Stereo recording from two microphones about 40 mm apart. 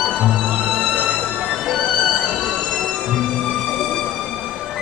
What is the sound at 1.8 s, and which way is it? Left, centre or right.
Music, centre.